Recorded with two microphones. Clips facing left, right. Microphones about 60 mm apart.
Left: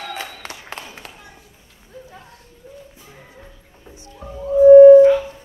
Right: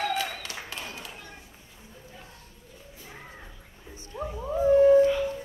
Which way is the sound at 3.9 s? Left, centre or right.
Right.